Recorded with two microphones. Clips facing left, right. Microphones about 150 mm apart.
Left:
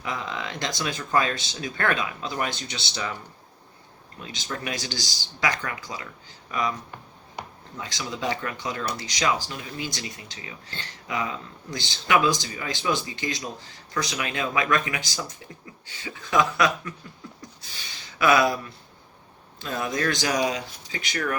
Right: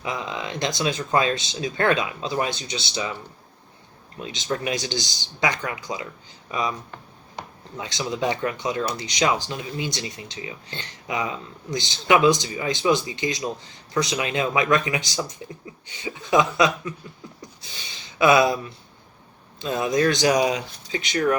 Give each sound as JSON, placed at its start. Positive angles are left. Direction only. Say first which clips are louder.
{"t": 0.0, "sound": "speech", "louder": "right 2 dB", "side_deg": -15}
{"t": 4.2, "sound": "speech", "louder": "right 6 dB", "side_deg": -20}
{"t": 7.8, "sound": "speech", "louder": "right 5 dB", "side_deg": -20}
{"t": 18.2, "sound": "speech", "louder": "right 3 dB", "side_deg": -20}